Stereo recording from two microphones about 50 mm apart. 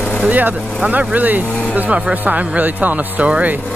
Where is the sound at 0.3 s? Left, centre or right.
Right.